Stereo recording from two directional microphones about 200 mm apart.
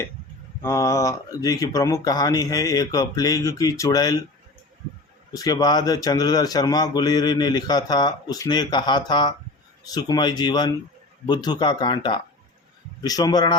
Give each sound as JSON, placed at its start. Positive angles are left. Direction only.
{"t": 0.6, "sound": "speech", "side_deg": 15}
{"t": 5.3, "sound": "speech", "side_deg": 20}